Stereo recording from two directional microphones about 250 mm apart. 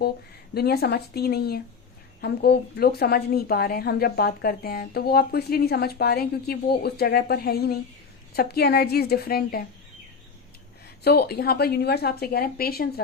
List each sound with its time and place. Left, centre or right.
0.5 s a woman's voice: left
11.0 s a woman's voice: left